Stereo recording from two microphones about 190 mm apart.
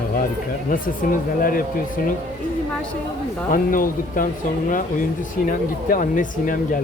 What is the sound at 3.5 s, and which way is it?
Speech, 45° left (ahead or behind).